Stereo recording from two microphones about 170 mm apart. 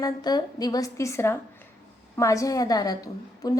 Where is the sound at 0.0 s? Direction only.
25° left (ahead or behind).